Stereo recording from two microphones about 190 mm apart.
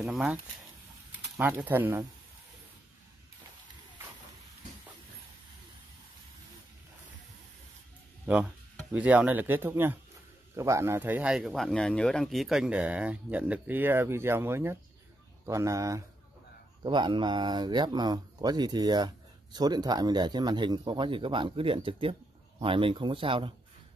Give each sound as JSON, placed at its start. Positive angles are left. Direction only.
{"t": 0.0, "sound": "speech", "side_deg": -5}
{"t": 1.4, "sound": "speech", "side_deg": -10}
{"t": 8.9, "sound": "speech", "side_deg": -10}